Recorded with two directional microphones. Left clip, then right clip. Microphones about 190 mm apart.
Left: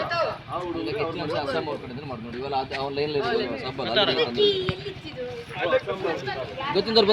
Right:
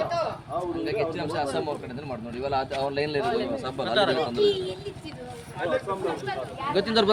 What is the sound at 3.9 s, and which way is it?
Speech, 35° right (ahead or behind).